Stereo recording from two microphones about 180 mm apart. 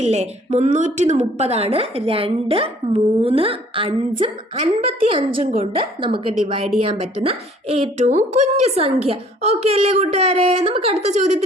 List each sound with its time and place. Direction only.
0.0 s a woman's voice: 40° right (ahead or behind)